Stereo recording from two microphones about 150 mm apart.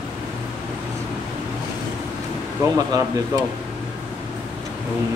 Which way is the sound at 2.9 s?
25° right (ahead or behind).